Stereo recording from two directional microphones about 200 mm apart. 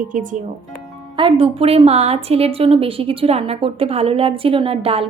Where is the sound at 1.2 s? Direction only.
25° right (ahead or behind).